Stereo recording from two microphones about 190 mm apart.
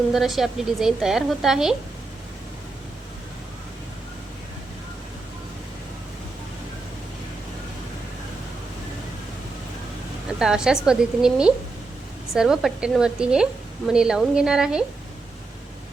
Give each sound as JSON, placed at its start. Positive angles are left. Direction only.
{"t": 0.1, "sound": "a woman's voice", "side_deg": 0}
{"t": 10.3, "sound": "a woman's voice", "side_deg": -5}